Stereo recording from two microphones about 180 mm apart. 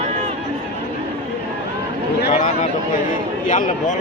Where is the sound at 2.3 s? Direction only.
35° left (ahead or behind).